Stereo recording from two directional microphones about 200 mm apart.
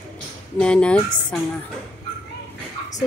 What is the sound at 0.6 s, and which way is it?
Speech, 5° left (ahead or behind).